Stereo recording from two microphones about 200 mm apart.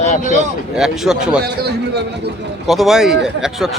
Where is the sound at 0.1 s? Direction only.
40° left (ahead or behind).